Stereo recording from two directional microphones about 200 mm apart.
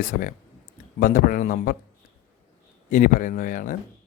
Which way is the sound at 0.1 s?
45° left (ahead or behind).